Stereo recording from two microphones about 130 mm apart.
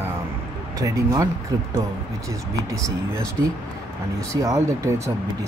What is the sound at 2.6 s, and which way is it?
Speech, 25° right (ahead or behind).